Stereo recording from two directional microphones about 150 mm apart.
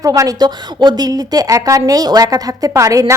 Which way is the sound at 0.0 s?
25° right (ahead or behind).